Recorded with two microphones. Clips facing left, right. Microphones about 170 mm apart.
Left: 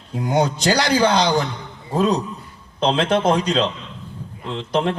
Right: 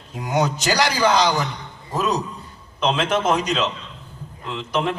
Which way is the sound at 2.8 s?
35° left (ahead or behind).